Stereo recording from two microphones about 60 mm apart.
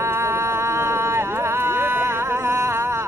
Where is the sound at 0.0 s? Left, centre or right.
Right.